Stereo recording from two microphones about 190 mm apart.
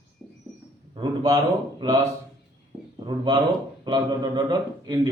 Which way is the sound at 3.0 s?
25° right (ahead or behind).